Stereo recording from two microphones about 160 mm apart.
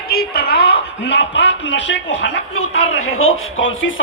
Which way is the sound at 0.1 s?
80° left.